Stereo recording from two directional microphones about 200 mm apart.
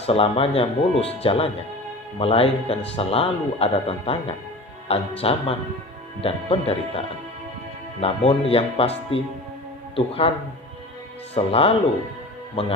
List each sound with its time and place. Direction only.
0.0 s speech: 30° left (ahead or behind)
8.0 s speech: 30° left (ahead or behind)
9.9 s speech: 30° left (ahead or behind)
11.3 s speech: 30° left (ahead or behind)